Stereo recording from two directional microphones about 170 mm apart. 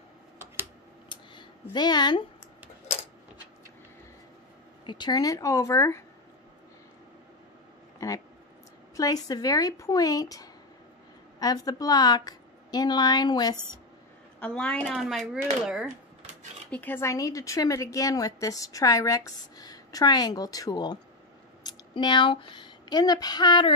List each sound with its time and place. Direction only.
1.0 s a sound: 25° left (ahead or behind)
4.8 s a woman's voice: 25° left (ahead or behind)
8.0 s a woman's voice: 20° left (ahead or behind)
14.4 s speech: 5° left (ahead or behind)
16.7 s a woman's voice: 10° left (ahead or behind)